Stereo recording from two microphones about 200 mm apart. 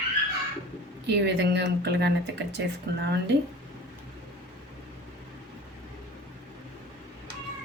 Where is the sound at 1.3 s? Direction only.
60° right (ahead or behind).